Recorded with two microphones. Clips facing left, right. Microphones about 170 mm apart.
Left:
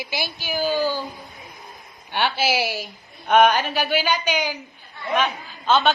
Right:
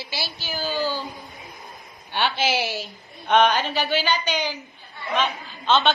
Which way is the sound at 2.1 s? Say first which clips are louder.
Left 1 dB; 10° left (ahead or behind).